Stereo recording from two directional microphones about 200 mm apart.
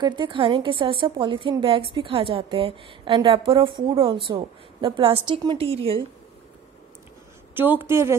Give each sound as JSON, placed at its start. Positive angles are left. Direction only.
{"t": 0.0, "sound": "a woman's voice", "side_deg": -25}
{"t": 7.5, "sound": "a woman's voice", "side_deg": -10}